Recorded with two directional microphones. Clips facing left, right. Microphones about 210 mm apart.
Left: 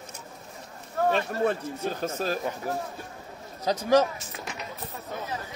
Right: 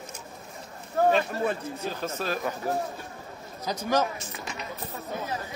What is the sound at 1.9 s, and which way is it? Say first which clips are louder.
Speech: left 2 dB; 45° left (ahead or behind).